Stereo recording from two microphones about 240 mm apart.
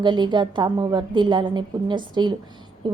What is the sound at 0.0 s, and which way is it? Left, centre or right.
A woman's voice, centre.